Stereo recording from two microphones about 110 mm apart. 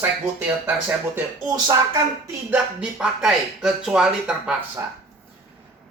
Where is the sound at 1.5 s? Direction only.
30° right (ahead or behind).